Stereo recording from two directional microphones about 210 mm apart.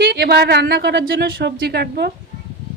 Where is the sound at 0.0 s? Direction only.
50° right (ahead or behind).